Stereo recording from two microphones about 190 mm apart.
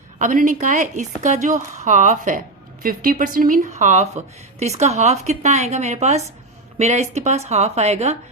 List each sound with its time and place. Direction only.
0.2 s a woman's voice: 40° right (ahead or behind)